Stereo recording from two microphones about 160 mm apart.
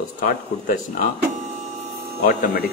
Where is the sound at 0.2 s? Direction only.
60° left (ahead or behind).